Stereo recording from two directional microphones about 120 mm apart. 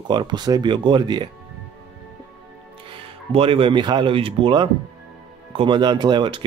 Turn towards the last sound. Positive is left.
turn(degrees=-40)  # may be behind; listen again after turning